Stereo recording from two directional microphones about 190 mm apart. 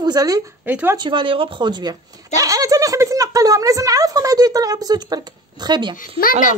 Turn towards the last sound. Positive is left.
turn(degrees=45)  # may be behind; listen again after turning